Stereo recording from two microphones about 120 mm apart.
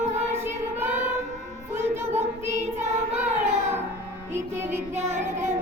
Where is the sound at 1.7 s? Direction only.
20° right (ahead or behind).